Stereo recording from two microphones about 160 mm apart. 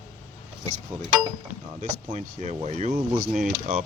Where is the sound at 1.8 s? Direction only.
45° right (ahead or behind).